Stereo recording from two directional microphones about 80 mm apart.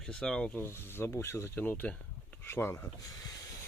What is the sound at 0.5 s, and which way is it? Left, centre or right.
Speech, left.